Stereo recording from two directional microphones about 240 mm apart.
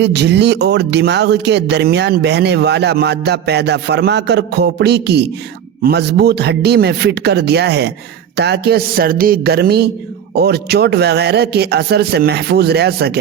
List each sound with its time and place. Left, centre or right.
0.0 s speech: right